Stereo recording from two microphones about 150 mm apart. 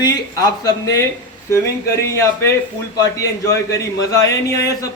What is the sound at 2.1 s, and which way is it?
A man's voice, 20° left (ahead or behind).